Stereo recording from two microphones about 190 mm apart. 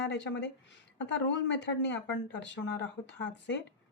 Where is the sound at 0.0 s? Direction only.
65° left (ahead or behind).